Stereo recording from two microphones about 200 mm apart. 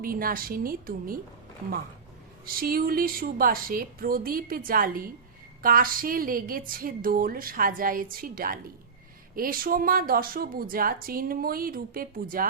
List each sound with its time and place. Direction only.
0.0 s speech: 45° right (ahead or behind)
2.5 s speech: 45° right (ahead or behind)